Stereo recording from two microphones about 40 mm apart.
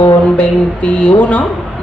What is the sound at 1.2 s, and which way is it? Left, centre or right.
Speech, left.